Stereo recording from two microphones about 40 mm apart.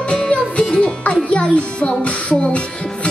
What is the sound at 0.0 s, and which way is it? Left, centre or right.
Music, left.